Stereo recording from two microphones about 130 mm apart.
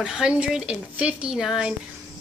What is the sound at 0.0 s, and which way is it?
Speech, 5° right (ahead or behind).